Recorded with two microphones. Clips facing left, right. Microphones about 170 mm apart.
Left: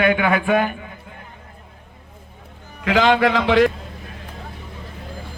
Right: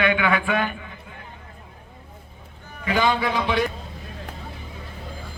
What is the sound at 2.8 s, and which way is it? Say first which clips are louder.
Speech: left 6 dB; 90° left.